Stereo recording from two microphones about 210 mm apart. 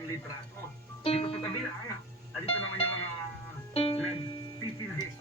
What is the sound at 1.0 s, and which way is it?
Music, 25° left (ahead or behind).